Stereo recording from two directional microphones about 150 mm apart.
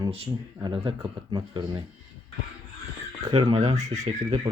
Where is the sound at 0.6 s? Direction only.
30° right (ahead or behind).